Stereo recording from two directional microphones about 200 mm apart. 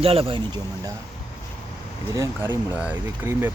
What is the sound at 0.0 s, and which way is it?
Speech, 30° right (ahead or behind).